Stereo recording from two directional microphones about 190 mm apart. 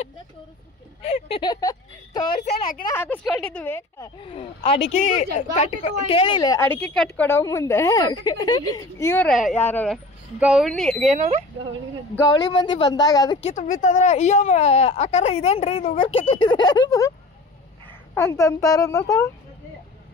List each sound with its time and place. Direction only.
1.0 s speech: 30° left (ahead or behind)
2.5 s speech: 45° left (ahead or behind)
2.9 s a woman's voice: 10° left (ahead or behind)
4.9 s speech: 40° left (ahead or behind)
5.9 s a woman's voice: 30° left (ahead or behind); by 9.3 s 10° left (ahead or behind)
9.3 s a woman's voice: centre (ahead or behind)
10.4 s speech: 5° right (ahead or behind)
11.1 s speech: 40° right (ahead or behind)
12.2 s speech: 20° left (ahead or behind)
13.4 s speech: 35° left (ahead or behind); by 17.1 s 20° left (ahead or behind)
18.1 s a woman's voice: 15° left (ahead or behind)